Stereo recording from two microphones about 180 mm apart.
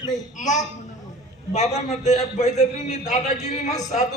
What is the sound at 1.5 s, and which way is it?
A man's voice, 40° left (ahead or behind).